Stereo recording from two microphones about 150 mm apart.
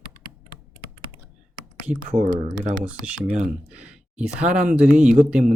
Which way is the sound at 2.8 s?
10° right (ahead or behind).